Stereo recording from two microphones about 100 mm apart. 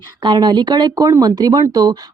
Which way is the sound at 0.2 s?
50° right (ahead or behind).